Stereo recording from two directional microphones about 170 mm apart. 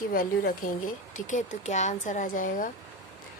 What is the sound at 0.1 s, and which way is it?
Speech, 60° left (ahead or behind).